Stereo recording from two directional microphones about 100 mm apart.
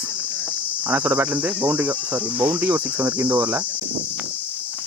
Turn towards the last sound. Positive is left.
turn(degrees=-15)  # may be behind; listen again after turning